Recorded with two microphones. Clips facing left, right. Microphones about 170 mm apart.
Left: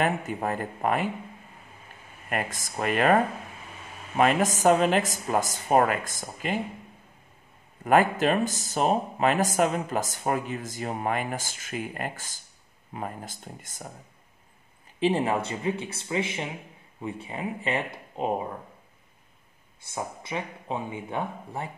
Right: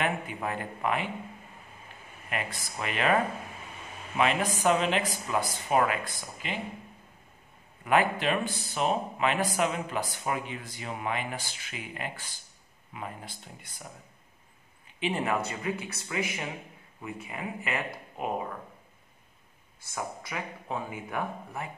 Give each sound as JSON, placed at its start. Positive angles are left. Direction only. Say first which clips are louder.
{"t": 0.0, "sound": "speech", "louder": "left 4 dB", "side_deg": 40}
{"t": 2.2, "sound": "speech", "louder": "left 4 dB", "side_deg": 45}
{"t": 4.2, "sound": "speech", "louder": "left 5 dB", "side_deg": 45}
{"t": 7.8, "sound": "speech", "louder": "left 4 dB", "side_deg": 45}
{"t": 15.0, "sound": "speech", "louder": "left 5 dB", "side_deg": 35}
{"t": 19.9, "sound": "speech", "louder": "left 3 dB", "side_deg": 25}